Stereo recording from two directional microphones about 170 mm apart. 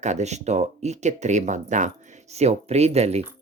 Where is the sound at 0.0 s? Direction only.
40° right (ahead or behind).